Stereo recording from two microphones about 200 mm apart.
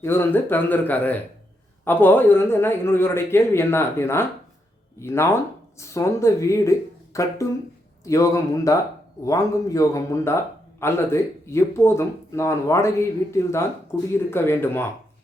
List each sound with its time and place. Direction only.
0.0 s a man's voice: 10° left (ahead or behind)